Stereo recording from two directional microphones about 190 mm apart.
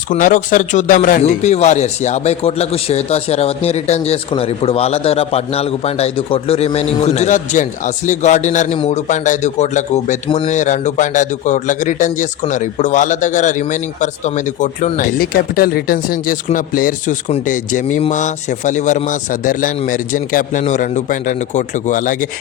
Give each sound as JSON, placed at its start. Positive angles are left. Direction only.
{"t": 0.1, "sound": "a man's voice", "side_deg": 45}